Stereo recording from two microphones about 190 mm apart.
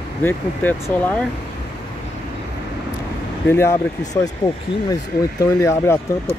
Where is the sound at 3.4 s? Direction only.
15° left (ahead or behind).